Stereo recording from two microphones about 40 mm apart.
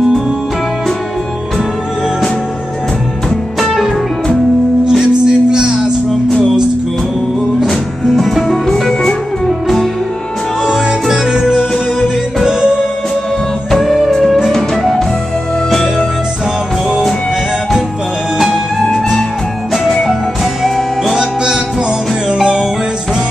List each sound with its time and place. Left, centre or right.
4.8 s music: centre
8.2 s music: centre
10.6 s music: centre
13.7 s music: centre
20.6 s music: centre
21.1 s music: centre